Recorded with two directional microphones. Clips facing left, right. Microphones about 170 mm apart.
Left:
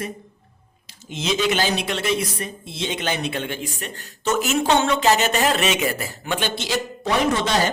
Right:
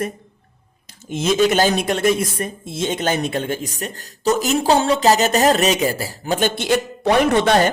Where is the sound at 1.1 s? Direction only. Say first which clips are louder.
Right 6 dB; 50° right (ahead or behind).